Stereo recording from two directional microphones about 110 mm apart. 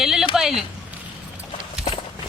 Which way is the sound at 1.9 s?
65° left (ahead or behind).